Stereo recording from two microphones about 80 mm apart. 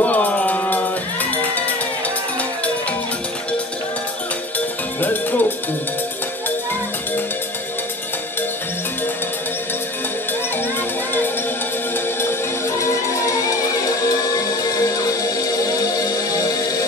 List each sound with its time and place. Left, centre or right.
0.0 s music: centre
4.6 s music: left
15.0 s music: left